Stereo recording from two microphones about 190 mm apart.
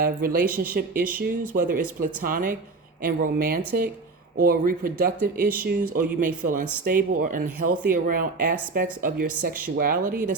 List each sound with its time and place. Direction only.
0.0 s speech: 50° right (ahead or behind)